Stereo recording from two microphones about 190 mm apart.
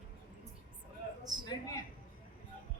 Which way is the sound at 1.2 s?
20° right (ahead or behind).